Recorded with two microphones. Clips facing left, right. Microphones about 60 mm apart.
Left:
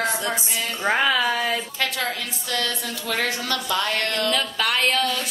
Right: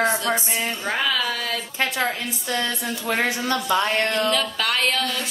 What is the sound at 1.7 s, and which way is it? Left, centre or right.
A woman's voice, right.